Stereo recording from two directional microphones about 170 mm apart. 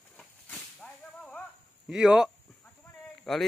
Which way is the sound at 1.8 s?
5° right (ahead or behind).